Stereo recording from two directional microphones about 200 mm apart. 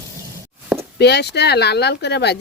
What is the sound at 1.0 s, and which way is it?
Speech, 55° left (ahead or behind).